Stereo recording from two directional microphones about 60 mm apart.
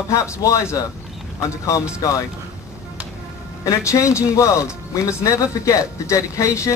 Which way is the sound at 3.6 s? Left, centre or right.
Left.